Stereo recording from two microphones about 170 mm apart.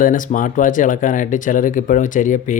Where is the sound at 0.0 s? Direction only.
50° left (ahead or behind).